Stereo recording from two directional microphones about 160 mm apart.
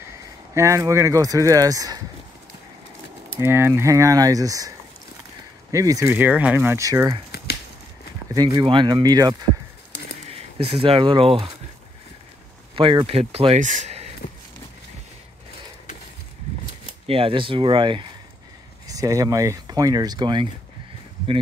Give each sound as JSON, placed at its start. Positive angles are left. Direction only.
{"t": 0.6, "sound": "speech", "side_deg": -20}
{"t": 3.3, "sound": "speech", "side_deg": -15}
{"t": 8.5, "sound": "speech", "side_deg": -30}
{"t": 9.9, "sound": "a sound", "side_deg": 90}
{"t": 10.3, "sound": "speech", "side_deg": -35}
{"t": 12.7, "sound": "speech", "side_deg": -35}
{"t": 17.0, "sound": "speech", "side_deg": -35}
{"t": 18.9, "sound": "speech", "side_deg": -20}